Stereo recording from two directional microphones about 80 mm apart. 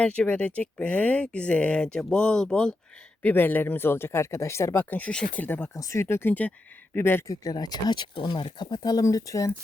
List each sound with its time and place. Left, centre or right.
0.0 s speech: centre
3.2 s speech: left
5.6 s speech: left
7.3 s speech: left